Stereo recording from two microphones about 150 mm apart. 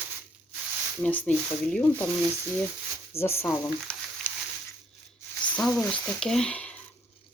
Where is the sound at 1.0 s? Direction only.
10° left (ahead or behind).